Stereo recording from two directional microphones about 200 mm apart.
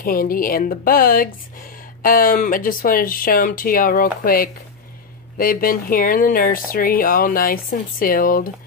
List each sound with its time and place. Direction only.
0.0 s speech: 45° left (ahead or behind)